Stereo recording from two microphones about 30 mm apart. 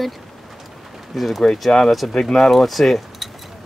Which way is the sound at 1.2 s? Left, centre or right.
Centre.